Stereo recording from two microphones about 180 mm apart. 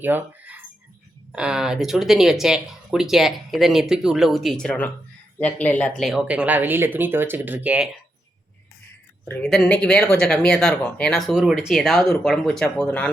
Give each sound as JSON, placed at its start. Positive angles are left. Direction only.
{"t": 0.0, "sound": "a sound", "side_deg": -10}
{"t": 1.3, "sound": "speech", "side_deg": -5}
{"t": 9.4, "sound": "speech", "side_deg": 5}